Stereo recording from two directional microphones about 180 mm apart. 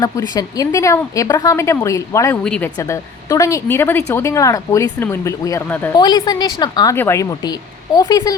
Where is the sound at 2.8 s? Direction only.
15° left (ahead or behind).